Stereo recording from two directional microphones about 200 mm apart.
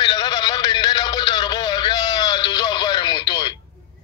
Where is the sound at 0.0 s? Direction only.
20° left (ahead or behind).